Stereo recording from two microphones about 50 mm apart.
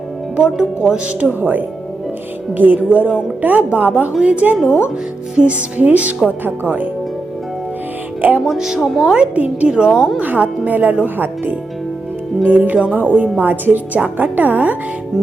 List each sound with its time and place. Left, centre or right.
0.3 s speech: right
1.3 s a woman's voice: right
3.1 s a woman's voice: centre
3.4 s a woman's voice: right
8.4 s a woman's voice: centre
9.3 s speech: right
9.6 s speech: centre
10.2 s a woman's voice: right